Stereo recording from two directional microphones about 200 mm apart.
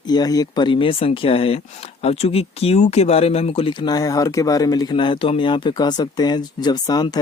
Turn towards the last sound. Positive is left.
turn(degrees=20)  # may be behind; listen again after turning